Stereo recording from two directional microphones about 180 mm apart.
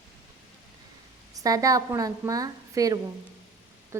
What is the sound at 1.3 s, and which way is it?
A woman's voice, 20° right (ahead or behind).